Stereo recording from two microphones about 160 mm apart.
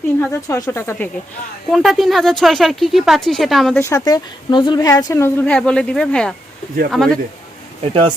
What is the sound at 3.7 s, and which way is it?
A woman's voice, 20° left (ahead or behind).